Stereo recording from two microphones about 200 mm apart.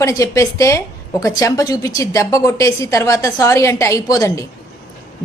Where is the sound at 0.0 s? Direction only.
15° left (ahead or behind).